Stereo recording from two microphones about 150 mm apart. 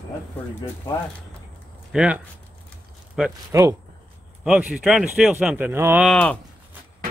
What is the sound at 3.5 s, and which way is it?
Speech, 20° right (ahead or behind).